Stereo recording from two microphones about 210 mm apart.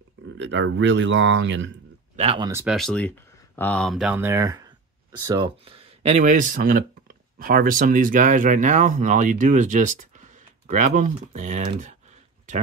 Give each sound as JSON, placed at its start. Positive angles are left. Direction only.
{"t": 0.4, "sound": "speech", "side_deg": -60}
{"t": 2.1, "sound": "speech", "side_deg": -25}
{"t": 2.5, "sound": "speech", "side_deg": 0}
{"t": 11.8, "sound": "typing", "side_deg": -35}